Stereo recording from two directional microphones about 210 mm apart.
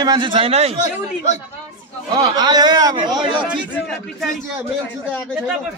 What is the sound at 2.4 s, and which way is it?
A man's voice, 20° right (ahead or behind).